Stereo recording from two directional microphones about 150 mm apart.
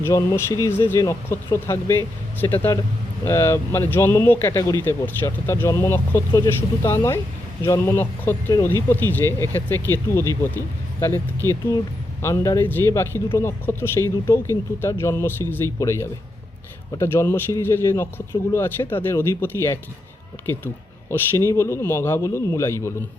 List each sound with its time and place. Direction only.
0.0 s speech: 25° left (ahead or behind)
12.2 s speech: 20° left (ahead or behind)
21.1 s speech: 20° left (ahead or behind)